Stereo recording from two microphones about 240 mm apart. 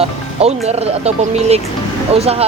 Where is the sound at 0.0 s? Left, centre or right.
Right.